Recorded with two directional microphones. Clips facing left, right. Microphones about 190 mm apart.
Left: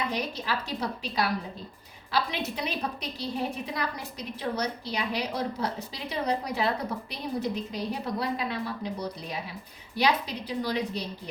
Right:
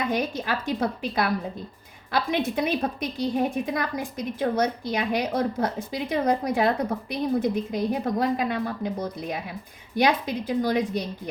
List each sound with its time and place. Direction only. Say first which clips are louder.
0.1 s a woman's voice: right 5 dB; 50° right (ahead or behind)